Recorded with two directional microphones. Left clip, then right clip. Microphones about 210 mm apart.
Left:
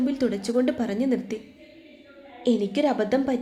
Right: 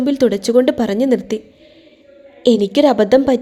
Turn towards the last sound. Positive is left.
turn(degrees=-45)  # may be behind; listen again after turning